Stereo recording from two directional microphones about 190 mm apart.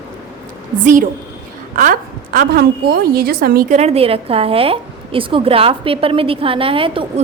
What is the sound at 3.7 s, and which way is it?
A woman's voice, 30° right (ahead or behind).